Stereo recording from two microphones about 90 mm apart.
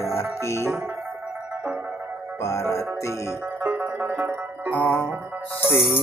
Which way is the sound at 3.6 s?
15° right (ahead or behind).